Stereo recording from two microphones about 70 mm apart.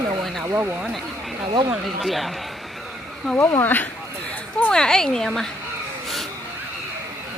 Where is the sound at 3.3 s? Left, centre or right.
Left.